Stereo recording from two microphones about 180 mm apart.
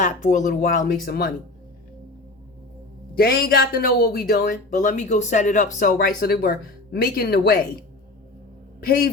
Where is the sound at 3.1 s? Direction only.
55° left (ahead or behind).